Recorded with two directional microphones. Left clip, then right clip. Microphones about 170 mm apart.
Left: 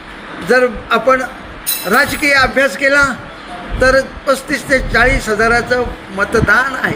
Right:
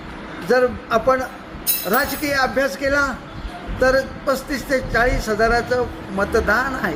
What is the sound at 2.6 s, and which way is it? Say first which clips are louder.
A man's voice: left 8 dB; 30° left (ahead or behind).